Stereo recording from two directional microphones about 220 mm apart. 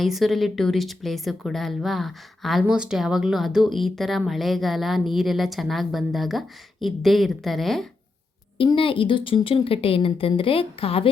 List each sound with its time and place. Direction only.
0.0 s speech: centre (ahead or behind)
8.5 s speech: 25° left (ahead or behind)